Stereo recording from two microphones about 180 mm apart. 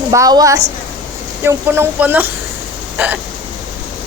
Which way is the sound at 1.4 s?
15° right (ahead or behind).